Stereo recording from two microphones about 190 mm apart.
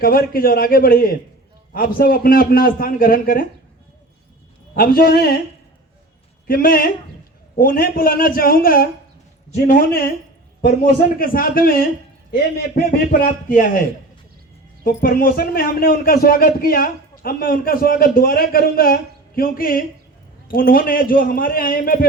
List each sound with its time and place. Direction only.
0.0 s a man's voice: 50° left (ahead or behind)
4.7 s a man's voice: 50° left (ahead or behind)
6.5 s a man's voice: 50° left (ahead or behind)
11.2 s a man's voice: 50° left (ahead or behind)
14.8 s a man's voice: 50° left (ahead or behind)